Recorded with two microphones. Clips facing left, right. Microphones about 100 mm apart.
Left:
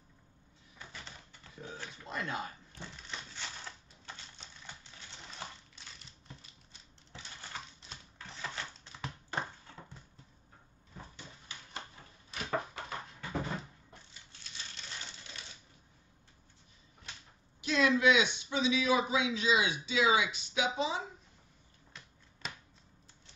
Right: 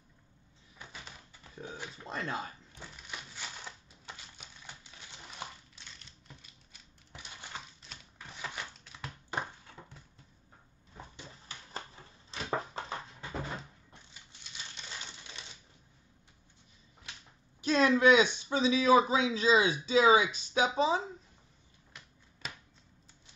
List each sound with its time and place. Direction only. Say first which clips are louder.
0.7 s typewriter: even; 15° right (ahead or behind)
2.0 s speech: right 1 dB; 30° right (ahead or behind)
2.7 s crushing: even; 10° right (ahead or behind)
7.1 s crushing: right 1 dB; 15° right (ahead or behind)
8.2 s typewriter: even; 15° right (ahead or behind)
8.8 s a sound: left 2 dB; centre (ahead or behind)
12.3 s a sound: right 1 dB; 25° right (ahead or behind)
17.6 s speech: right 3 dB; 40° right (ahead or behind)
22.4 s a sound: even; centre (ahead or behind)